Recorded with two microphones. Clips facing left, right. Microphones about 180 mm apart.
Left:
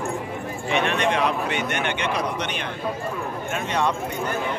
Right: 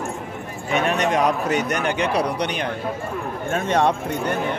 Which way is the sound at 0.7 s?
40° right (ahead or behind).